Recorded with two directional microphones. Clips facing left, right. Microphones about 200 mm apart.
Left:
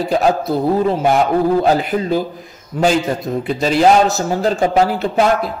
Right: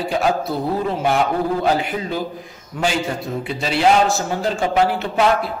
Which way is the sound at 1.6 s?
40° left (ahead or behind).